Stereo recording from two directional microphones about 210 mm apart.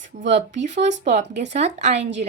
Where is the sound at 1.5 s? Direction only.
30° right (ahead or behind).